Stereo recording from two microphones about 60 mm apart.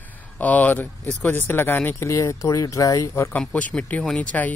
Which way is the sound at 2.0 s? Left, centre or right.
Left.